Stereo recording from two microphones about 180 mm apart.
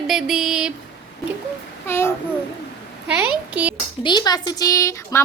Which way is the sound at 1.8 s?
15° left (ahead or behind).